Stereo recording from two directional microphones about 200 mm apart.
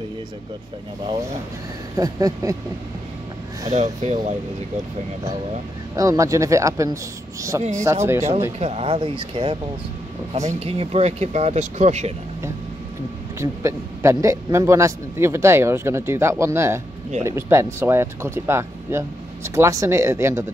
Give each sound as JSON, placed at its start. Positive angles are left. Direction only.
{"t": 2.0, "sound": "a man's voice", "side_deg": -20}
{"t": 3.7, "sound": "speech", "side_deg": -35}
{"t": 5.9, "sound": "a man's voice", "side_deg": -15}
{"t": 8.5, "sound": "speech", "side_deg": -30}
{"t": 13.4, "sound": "a man's voice", "side_deg": -15}